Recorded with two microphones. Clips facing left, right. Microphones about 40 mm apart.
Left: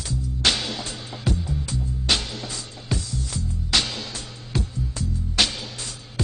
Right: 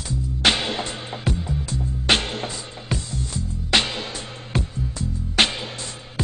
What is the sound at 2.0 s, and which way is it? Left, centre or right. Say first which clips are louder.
Music: right 5 dB; right.